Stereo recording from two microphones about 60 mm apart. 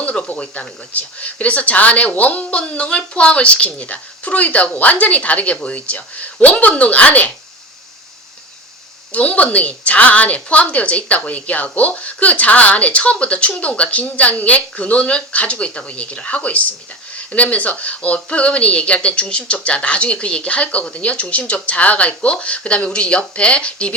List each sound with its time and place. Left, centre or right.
0.0 s speech: left
9.1 s speech: left